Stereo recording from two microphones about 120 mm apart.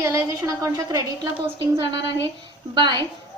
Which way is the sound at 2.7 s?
40° right (ahead or behind).